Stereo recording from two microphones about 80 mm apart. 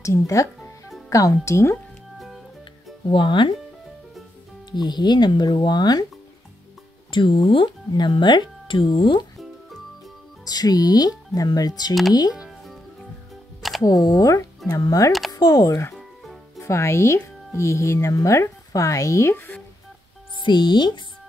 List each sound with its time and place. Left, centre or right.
0.0 s speech: left
2.1 s music: centre
3.2 s speech: left
4.6 s speech: left
7.1 s speech: left
10.4 s speech: left
13.6 s music: centre
13.8 s speech: left
16.5 s speech: left
19.3 s music: left
20.3 s speech: left